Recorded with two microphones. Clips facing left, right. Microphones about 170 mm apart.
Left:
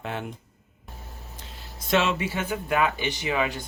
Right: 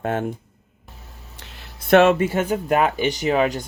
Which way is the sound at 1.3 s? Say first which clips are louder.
Even; 70° right (ahead or behind).